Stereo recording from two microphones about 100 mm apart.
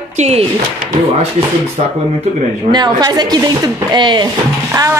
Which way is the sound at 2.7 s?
45° right (ahead or behind).